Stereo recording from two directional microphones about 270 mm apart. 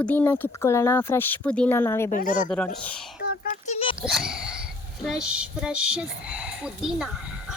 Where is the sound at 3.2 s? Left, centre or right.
Left.